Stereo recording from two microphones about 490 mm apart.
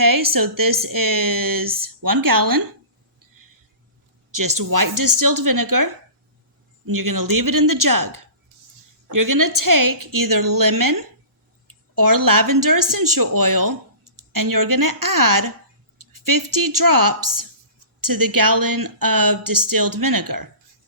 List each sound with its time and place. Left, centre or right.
0.0 s speech: right
4.3 s a woman's voice: right